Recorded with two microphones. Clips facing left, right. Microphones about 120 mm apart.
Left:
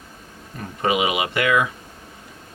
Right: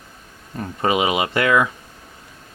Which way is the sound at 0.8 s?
35° right (ahead or behind).